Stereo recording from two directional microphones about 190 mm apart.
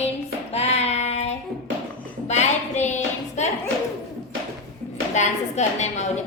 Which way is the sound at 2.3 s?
35° left (ahead or behind).